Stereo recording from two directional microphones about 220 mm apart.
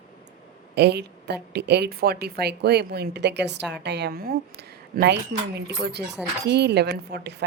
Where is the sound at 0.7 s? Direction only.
50° right (ahead or behind).